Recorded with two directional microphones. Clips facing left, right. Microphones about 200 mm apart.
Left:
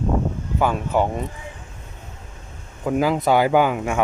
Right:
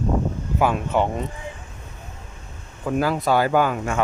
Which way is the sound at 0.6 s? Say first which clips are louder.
Even; centre (ahead or behind).